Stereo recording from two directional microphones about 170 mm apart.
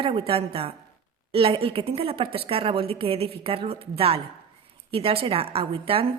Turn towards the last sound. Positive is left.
turn(degrees=-35)  # may be behind; listen again after turning